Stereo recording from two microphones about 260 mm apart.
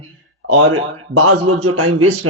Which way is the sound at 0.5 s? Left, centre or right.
Right.